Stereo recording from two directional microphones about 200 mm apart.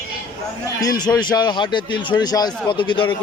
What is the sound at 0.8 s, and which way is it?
Speech, 20° left (ahead or behind).